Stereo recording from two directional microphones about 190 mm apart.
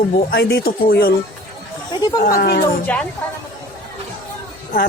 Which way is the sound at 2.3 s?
50° left (ahead or behind).